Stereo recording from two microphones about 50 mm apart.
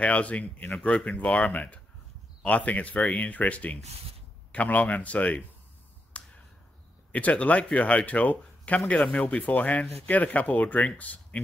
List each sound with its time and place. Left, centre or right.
0.0 s speech: left
6.1 s finger snapping: left
7.1 s speech: left